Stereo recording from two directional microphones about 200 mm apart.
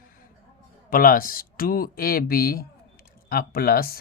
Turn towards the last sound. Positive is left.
turn(degrees=50)  # may be behind; listen again after turning